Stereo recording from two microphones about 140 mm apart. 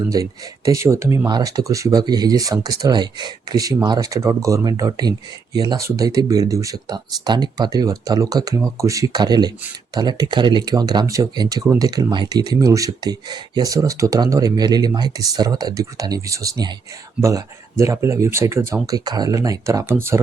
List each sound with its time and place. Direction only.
0.1 s speech: 25° right (ahead or behind)